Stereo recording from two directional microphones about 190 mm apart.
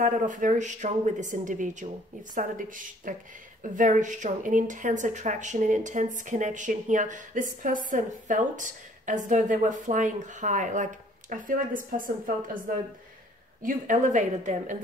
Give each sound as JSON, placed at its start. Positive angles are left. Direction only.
{"t": 0.0, "sound": "a woman's voice", "side_deg": -45}
{"t": 13.6, "sound": "a woman's voice", "side_deg": -45}